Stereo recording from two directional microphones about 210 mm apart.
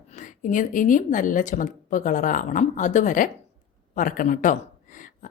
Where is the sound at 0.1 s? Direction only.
35° left (ahead or behind).